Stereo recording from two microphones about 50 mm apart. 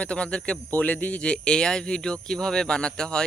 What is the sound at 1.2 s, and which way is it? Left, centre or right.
Speech, centre.